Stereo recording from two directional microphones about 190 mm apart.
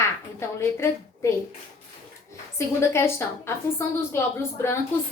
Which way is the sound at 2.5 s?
15° left (ahead or behind).